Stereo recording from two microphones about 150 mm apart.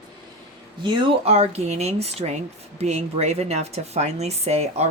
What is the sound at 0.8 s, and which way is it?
Speech, 35° right (ahead or behind).